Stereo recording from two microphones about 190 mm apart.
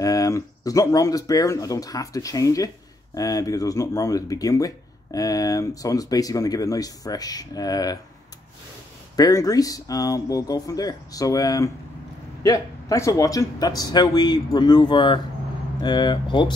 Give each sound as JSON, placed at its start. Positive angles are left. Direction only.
{"t": 0.0, "sound": "speech", "side_deg": 20}
{"t": 9.1, "sound": "speech", "side_deg": 20}